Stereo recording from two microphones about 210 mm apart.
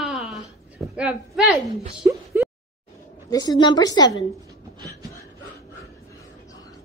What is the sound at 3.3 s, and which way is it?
Speech, 20° left (ahead or behind).